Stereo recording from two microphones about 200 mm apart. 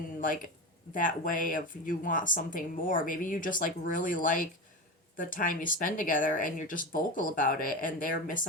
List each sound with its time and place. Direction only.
0.9 s speech: 40° left (ahead or behind)